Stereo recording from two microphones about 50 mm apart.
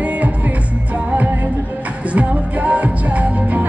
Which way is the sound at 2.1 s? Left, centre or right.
Right.